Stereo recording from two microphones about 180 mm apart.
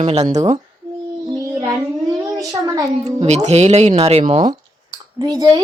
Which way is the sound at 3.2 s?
40° right (ahead or behind).